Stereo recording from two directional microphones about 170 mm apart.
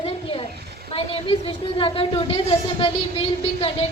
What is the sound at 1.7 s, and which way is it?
A woman's voice, 30° left (ahead or behind).